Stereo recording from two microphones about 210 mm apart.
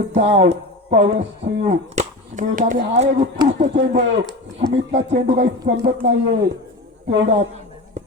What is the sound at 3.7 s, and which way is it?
Speech, 55° right (ahead or behind).